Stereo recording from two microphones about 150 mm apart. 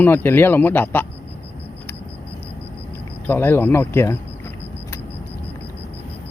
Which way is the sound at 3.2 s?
15° left (ahead or behind).